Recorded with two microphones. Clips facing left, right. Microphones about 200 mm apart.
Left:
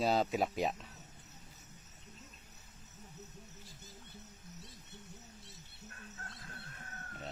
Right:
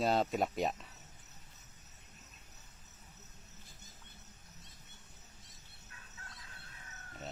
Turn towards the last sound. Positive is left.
turn(degrees=55)  # may be behind; listen again after turning